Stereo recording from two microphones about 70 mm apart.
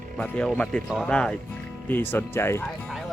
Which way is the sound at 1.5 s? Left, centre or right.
Left.